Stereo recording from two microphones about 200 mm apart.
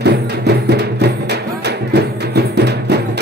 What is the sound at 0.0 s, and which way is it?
Music, 55° right (ahead or behind).